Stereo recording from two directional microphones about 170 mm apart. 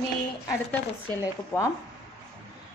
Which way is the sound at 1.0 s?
15° left (ahead or behind).